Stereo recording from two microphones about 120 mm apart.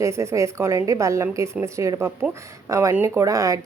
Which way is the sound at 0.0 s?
25° right (ahead or behind).